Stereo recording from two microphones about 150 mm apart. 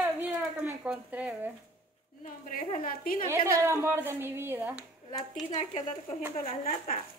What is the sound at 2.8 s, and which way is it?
Speech, 70° left (ahead or behind).